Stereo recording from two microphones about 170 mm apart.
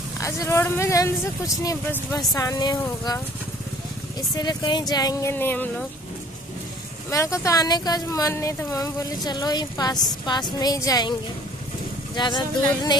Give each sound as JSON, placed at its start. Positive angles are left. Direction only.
{"t": 0.2, "sound": "speech", "side_deg": 15}
{"t": 4.4, "sound": "speech", "side_deg": 25}
{"t": 5.3, "sound": "speech", "side_deg": 10}
{"t": 7.1, "sound": "speech", "side_deg": 20}
{"t": 12.2, "sound": "speech", "side_deg": 25}